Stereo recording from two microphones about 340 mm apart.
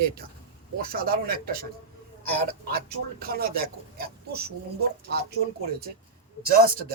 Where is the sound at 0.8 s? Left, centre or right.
Right.